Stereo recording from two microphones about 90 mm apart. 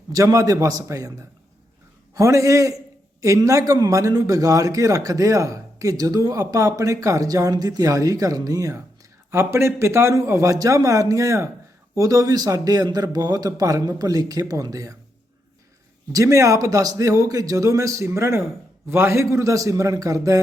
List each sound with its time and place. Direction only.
0.1 s a man's voice: 40° right (ahead or behind)
9.3 s a man's voice: 30° right (ahead or behind)
16.1 s a man's voice: 35° right (ahead or behind)